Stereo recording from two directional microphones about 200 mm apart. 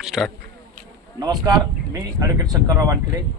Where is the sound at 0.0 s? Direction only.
Centre (ahead or behind).